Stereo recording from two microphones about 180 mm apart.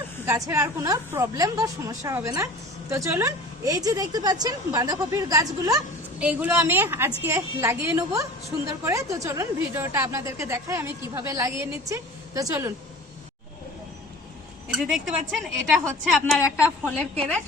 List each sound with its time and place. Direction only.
0.3 s a woman's voice: 20° right (ahead or behind)
6.1 s a woman's voice: 10° right (ahead or behind)
14.7 s a woman's voice: 5° right (ahead or behind)
16.4 s a woman's voice: 10° left (ahead or behind)